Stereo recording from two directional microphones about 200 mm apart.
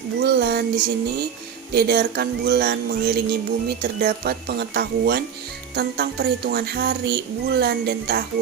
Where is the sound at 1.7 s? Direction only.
50° right (ahead or behind).